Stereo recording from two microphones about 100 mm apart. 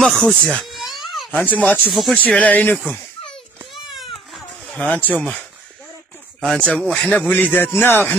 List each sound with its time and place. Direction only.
0.0 s a sound: 5° left (ahead or behind)
1.4 s speech: 15° left (ahead or behind)
3.7 s baby cry: centre (ahead or behind)
4.6 s speech: 15° left (ahead or behind)
6.4 s speech: 10° left (ahead or behind)
7.8 s a sound: 20° left (ahead or behind)